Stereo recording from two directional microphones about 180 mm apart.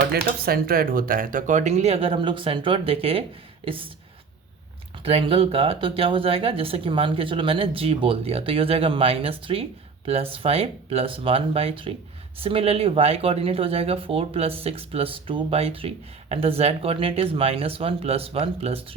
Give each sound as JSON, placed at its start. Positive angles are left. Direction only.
{"t": 0.1, "sound": "speech", "side_deg": -55}
{"t": 5.0, "sound": "speech", "side_deg": -30}